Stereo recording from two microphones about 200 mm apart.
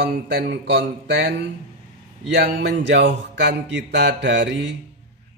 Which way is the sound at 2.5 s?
60° right (ahead or behind).